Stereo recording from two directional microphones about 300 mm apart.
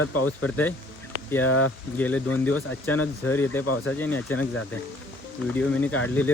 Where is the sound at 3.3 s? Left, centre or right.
Centre.